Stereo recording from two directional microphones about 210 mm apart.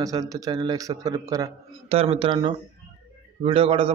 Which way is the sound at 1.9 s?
30° right (ahead or behind).